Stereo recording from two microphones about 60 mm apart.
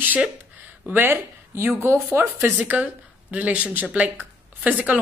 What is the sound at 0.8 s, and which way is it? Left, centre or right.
Speech, right.